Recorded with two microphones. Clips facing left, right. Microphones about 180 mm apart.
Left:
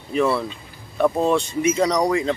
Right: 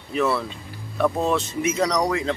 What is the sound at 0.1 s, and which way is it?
Speech, centre (ahead or behind).